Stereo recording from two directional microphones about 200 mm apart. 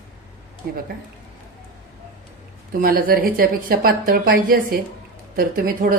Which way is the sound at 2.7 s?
45° right (ahead or behind).